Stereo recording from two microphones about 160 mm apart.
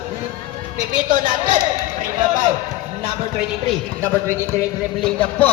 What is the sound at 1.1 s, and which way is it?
Speech, 50° right (ahead or behind).